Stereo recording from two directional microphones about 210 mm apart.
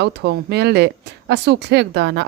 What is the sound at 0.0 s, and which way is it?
A woman's voice, 55° right (ahead or behind).